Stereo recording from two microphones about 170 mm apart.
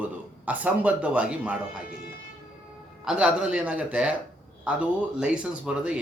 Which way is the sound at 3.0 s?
5° right (ahead or behind).